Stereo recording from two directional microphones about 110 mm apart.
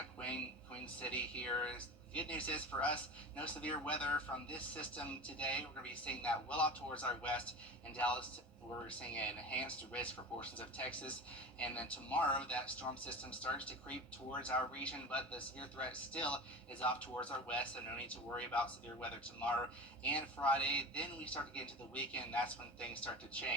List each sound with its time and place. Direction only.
0.2 s speech: 10° left (ahead or behind)